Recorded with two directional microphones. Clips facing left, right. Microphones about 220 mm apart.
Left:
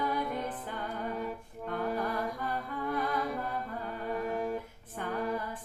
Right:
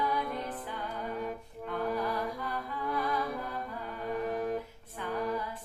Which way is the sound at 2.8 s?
50° left (ahead or behind).